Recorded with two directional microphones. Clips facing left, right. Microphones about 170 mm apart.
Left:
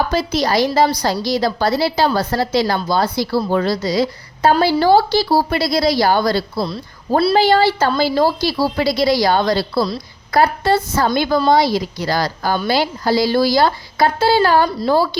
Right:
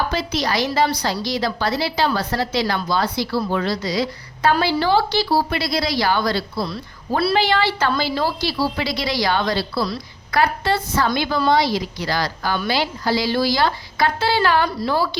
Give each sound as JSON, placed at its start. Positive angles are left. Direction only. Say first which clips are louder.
{"t": 0.1, "sound": "a woman's voice", "louder": "left 5 dB", "side_deg": 40}